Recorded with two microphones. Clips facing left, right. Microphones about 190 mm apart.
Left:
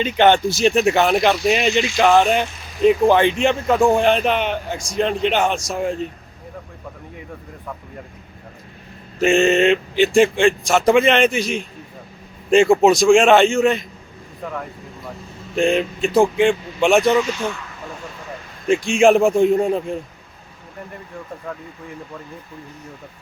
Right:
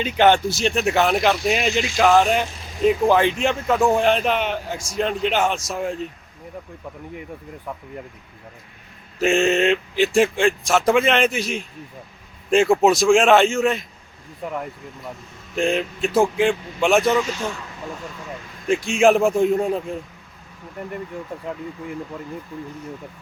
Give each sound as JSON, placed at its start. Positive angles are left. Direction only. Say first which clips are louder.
{"t": 0.0, "sound": "speech", "louder": "left 2 dB", "side_deg": -5}
{"t": 9.2, "sound": "speech", "louder": "left 3 dB", "side_deg": 0}
{"t": 15.5, "sound": "speech", "louder": "left 4 dB", "side_deg": 0}
{"t": 17.2, "sound": "speech", "louder": "left 3 dB", "side_deg": -40}
{"t": 18.7, "sound": "speech", "louder": "left 3 dB", "side_deg": -5}